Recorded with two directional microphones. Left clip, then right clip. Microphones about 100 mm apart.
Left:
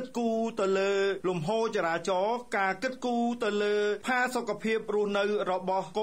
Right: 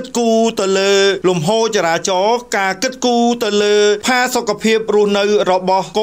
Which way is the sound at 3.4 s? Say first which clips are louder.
Right 14 dB; 45° right (ahead or behind).